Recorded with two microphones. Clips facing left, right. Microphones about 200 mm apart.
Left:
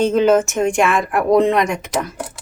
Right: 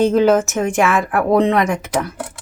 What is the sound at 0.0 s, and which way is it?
A woman's voice, 10° right (ahead or behind).